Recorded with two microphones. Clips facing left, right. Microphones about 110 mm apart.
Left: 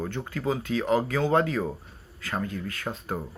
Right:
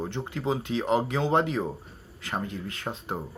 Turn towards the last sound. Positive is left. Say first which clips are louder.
# left 1 dB
turn(degrees=-25)  # may be behind; listen again after turning